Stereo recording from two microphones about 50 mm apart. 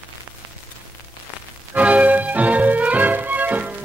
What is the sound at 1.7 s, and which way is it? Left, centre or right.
Music, right.